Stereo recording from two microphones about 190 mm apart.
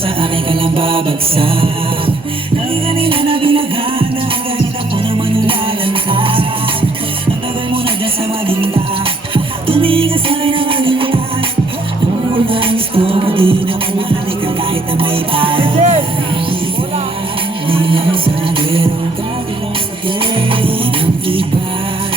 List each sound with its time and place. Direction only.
0.2 s music: 30° right (ahead or behind)
5.5 s music: 30° right (ahead or behind)
9.3 s music: 30° right (ahead or behind)
12.5 s music: 30° right (ahead or behind)
14.9 s music: 30° right (ahead or behind)
17.7 s music: 30° right (ahead or behind)
20.3 s music: 30° right (ahead or behind)